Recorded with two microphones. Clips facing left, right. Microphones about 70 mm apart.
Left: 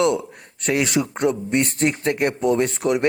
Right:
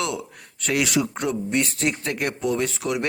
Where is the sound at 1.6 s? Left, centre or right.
Left.